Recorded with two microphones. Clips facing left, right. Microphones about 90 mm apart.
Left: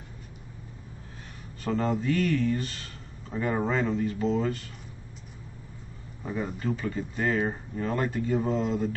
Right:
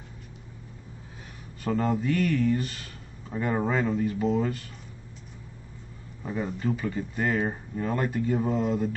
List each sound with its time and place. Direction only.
1.6 s speech: 5° right (ahead or behind)
6.2 s speech: centre (ahead or behind)